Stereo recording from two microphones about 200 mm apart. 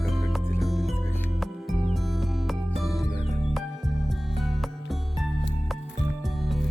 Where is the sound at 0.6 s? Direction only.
Centre (ahead or behind).